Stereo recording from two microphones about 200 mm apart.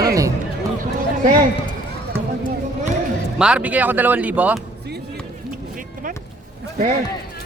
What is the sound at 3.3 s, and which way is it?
Speech, 5° right (ahead or behind).